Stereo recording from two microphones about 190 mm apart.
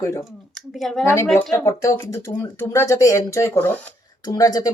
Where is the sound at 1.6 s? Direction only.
15° left (ahead or behind).